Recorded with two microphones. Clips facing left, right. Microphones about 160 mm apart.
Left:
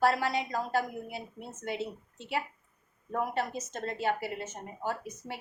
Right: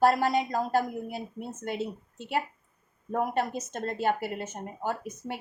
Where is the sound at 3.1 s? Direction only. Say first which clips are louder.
Right 4 dB; 50° right (ahead or behind).